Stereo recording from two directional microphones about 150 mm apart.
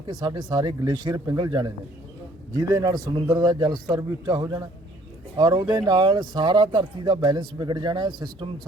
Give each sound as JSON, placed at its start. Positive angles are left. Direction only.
{"t": 0.1, "sound": "speech", "side_deg": -30}